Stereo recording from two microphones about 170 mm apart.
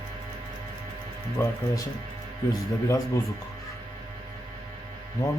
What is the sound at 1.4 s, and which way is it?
Speech, 20° left (ahead or behind).